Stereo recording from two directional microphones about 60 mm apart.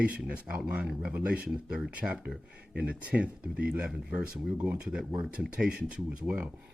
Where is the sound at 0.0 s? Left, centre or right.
Right.